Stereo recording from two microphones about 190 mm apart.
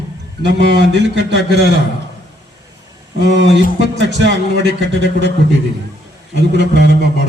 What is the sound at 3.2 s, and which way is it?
A man's voice, 65° right (ahead or behind).